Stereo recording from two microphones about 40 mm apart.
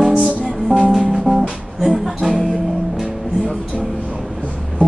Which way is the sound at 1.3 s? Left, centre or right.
Right.